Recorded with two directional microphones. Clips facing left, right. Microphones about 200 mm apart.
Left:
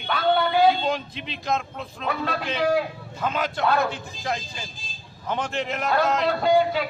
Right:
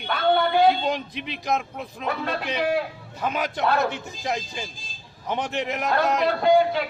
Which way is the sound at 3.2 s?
15° right (ahead or behind).